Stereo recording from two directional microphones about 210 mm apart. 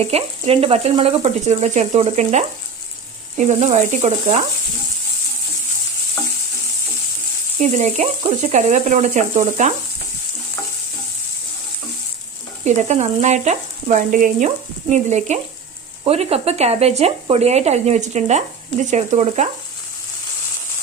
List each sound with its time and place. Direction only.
0.1 s speech: 30° right (ahead or behind)
7.6 s speech: 35° right (ahead or behind)
12.6 s speech: 35° right (ahead or behind)